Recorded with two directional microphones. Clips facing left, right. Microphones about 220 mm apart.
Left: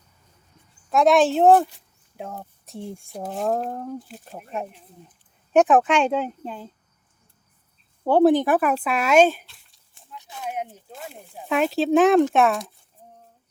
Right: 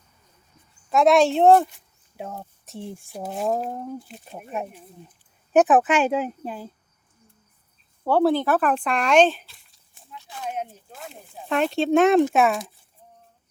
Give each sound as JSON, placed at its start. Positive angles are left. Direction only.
{"t": 0.9, "sound": "speech", "side_deg": 0}
{"t": 8.0, "sound": "speech", "side_deg": 20}
{"t": 9.5, "sound": "a sound", "side_deg": 0}
{"t": 10.2, "sound": "speech", "side_deg": 15}